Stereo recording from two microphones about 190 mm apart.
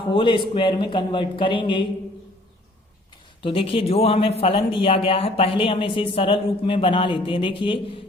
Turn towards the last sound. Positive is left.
turn(degrees=25)  # may be behind; listen again after turning